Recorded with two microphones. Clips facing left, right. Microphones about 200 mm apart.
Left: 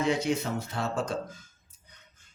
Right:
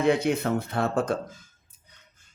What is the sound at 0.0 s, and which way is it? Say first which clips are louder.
Speech: right 4 dB; 60° right (ahead or behind).